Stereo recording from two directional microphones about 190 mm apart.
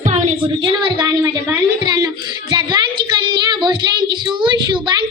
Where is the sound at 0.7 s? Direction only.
25° right (ahead or behind).